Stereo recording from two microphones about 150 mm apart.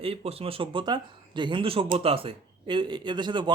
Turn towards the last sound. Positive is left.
turn(degrees=-30)  # may be behind; listen again after turning